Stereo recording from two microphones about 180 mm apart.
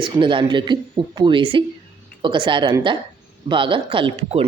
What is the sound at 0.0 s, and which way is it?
Speech, 25° right (ahead or behind).